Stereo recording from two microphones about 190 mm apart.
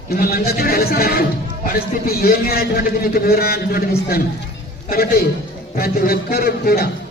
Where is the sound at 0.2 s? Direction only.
55° left (ahead or behind).